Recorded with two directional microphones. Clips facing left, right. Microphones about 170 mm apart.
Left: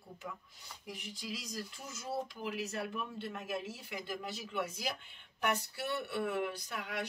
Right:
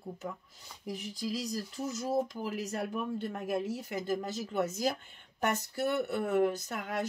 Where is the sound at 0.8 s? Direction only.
40° right (ahead or behind).